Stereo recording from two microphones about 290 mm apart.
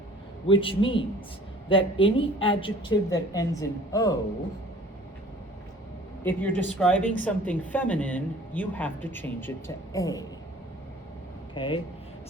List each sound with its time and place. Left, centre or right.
0.4 s a woman's voice: centre
6.2 s speech: centre
11.5 s a woman's voice: centre